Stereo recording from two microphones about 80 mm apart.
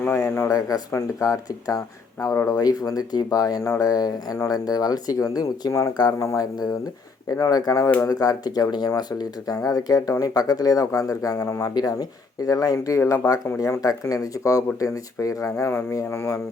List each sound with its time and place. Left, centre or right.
0.0 s speech: left